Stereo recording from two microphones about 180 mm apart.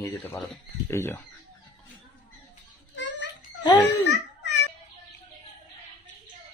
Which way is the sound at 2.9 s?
80° left.